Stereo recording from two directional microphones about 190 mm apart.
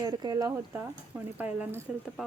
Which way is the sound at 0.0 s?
20° right (ahead or behind).